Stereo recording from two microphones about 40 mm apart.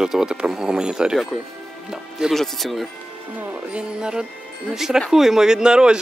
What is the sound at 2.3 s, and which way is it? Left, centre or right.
Speech, centre.